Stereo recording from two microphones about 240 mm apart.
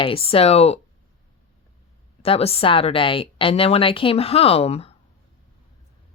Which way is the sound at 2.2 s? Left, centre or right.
Left.